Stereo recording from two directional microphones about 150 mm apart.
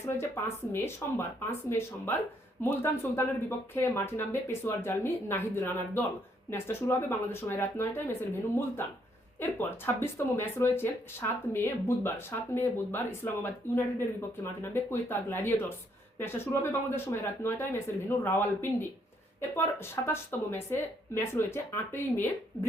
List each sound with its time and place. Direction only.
0.0 s speech: 15° left (ahead or behind)